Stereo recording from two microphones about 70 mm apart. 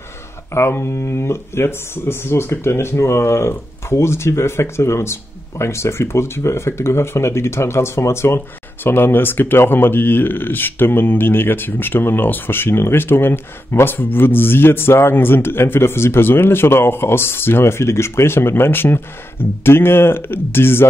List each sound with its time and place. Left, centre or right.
0.6 s speech: left